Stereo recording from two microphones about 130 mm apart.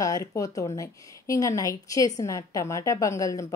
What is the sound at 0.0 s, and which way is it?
A woman's voice, 25° left (ahead or behind).